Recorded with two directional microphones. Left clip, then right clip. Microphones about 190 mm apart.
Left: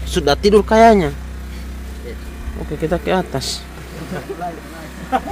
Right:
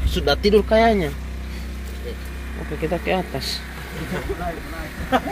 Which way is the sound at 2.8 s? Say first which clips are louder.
Left 4 dB; 35° left (ahead or behind).